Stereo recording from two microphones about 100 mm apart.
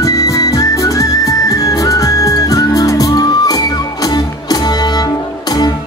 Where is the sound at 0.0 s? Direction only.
35° left (ahead or behind).